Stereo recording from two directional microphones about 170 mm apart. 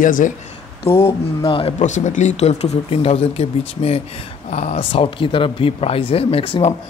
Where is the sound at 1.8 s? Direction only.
45° left (ahead or behind).